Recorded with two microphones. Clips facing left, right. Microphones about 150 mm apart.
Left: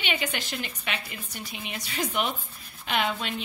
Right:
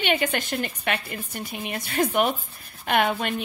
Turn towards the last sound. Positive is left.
turn(degrees=-55)  # may be behind; listen again after turning